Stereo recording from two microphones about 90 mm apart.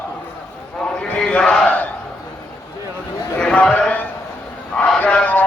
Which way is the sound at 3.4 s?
10° left (ahead or behind).